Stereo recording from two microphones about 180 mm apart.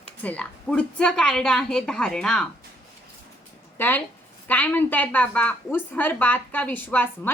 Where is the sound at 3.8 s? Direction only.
10° left (ahead or behind).